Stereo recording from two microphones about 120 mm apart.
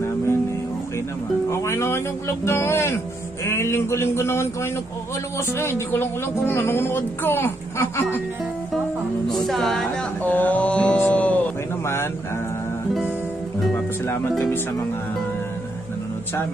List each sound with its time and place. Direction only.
1.5 s a woman's voice: 20° left (ahead or behind)
5.6 s a woman's voice: 20° left (ahead or behind)
9.5 s a woman's voice: 5° left (ahead or behind)
10.2 s speech: 15° left (ahead or behind)